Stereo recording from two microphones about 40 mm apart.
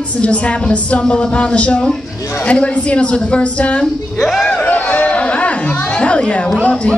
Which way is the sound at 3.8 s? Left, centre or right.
Centre.